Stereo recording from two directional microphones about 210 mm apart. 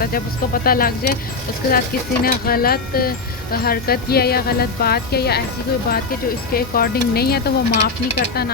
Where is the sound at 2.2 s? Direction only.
45° left (ahead or behind).